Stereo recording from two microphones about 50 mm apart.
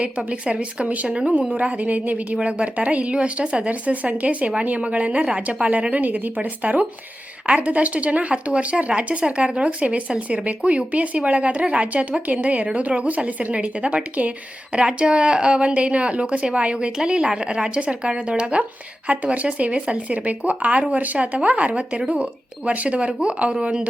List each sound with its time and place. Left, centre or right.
0.3 s speech: right
1.0 s speech: centre